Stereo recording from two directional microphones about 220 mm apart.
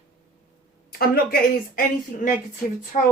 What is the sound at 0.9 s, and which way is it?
Speech, 40° left (ahead or behind).